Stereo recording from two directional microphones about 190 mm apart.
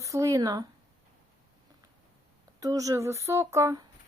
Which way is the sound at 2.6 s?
20° right (ahead or behind).